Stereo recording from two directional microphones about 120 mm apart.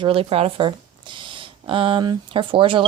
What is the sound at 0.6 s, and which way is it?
Speech, 40° right (ahead or behind).